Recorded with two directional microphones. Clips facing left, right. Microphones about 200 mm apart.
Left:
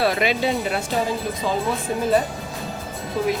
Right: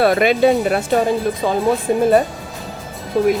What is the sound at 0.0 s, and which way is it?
Speech, 50° right (ahead or behind).